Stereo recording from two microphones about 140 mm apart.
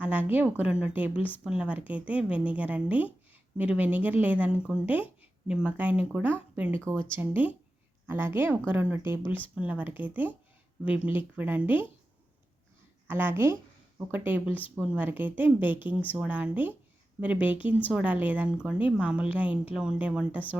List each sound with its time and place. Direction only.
0.0 s speech: 10° right (ahead or behind)
13.1 s speech: 15° right (ahead or behind)